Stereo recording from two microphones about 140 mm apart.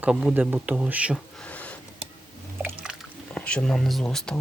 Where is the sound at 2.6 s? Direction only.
5° right (ahead or behind).